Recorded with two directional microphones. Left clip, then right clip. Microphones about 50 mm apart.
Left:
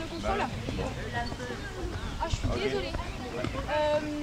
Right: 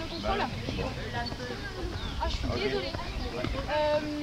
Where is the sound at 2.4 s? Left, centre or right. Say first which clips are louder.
Even; centre.